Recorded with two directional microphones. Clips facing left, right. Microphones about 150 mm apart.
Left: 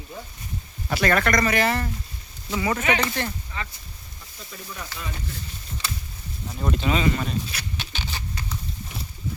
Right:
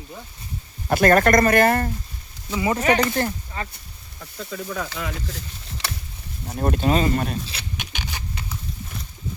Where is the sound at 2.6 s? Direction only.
25° right (ahead or behind).